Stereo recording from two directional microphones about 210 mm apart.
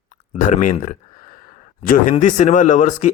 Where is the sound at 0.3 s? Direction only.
35° left (ahead or behind).